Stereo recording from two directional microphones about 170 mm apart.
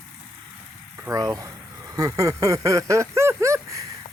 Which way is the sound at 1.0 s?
20° right (ahead or behind).